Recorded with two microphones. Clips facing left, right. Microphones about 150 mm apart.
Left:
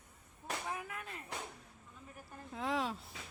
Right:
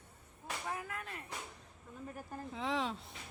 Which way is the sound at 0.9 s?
15° left (ahead or behind).